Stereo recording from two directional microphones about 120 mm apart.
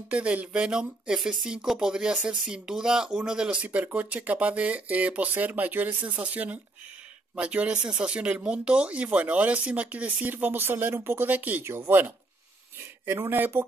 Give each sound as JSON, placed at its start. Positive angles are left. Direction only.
{"t": 0.1, "sound": "speech", "side_deg": -10}